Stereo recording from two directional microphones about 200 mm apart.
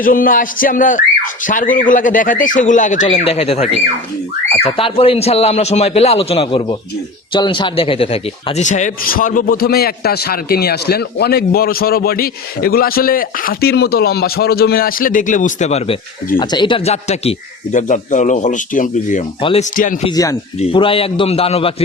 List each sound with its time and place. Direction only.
0.0 s a man's voice: 45° left (ahead or behind)
16.4 s speech: 20° left (ahead or behind); by 19.2 s 40° left (ahead or behind)
19.4 s speech: 25° left (ahead or behind)
19.7 s a man's voice: 40° left (ahead or behind)
20.1 s speech: 20° left (ahead or behind)